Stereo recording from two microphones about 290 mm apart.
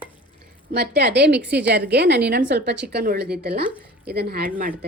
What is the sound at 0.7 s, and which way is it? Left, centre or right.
A woman's voice, right.